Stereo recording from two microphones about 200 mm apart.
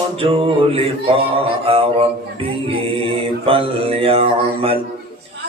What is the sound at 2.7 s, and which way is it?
Mantra, 25° right (ahead or behind).